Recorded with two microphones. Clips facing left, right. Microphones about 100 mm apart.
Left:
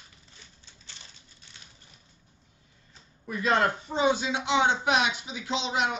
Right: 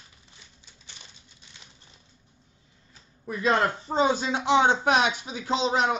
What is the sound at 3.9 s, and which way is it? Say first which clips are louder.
Speech: right 2 dB; 40° right (ahead or behind).